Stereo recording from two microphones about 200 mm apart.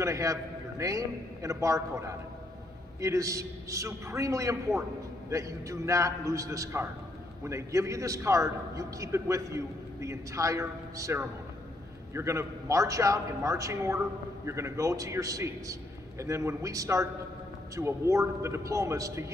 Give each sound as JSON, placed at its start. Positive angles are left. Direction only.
{"t": 0.0, "sound": "a man's voice", "side_deg": -15}